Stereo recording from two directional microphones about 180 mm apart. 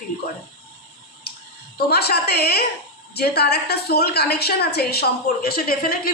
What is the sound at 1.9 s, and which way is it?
A woman's voice, 65° left (ahead or behind).